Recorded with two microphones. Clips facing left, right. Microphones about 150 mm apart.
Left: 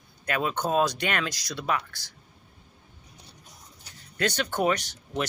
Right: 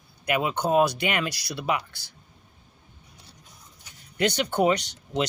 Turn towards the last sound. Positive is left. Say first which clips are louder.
# right 3 dB
turn(degrees=-15)  # may be behind; listen again after turning